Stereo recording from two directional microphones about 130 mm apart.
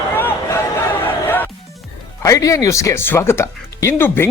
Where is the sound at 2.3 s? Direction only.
25° left (ahead or behind).